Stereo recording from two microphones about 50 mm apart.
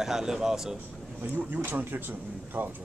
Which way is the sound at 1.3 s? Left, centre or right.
Right.